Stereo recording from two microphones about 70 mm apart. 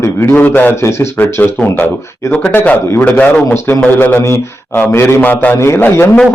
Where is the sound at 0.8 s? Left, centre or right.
Left.